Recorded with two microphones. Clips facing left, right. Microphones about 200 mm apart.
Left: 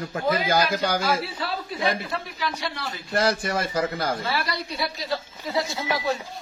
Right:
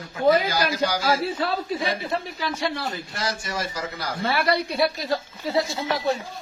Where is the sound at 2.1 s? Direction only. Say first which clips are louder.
Right 2 dB; 45° right (ahead or behind).